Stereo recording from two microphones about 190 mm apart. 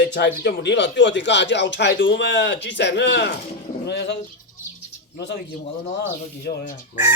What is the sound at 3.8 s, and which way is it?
Fowl, 65° left (ahead or behind).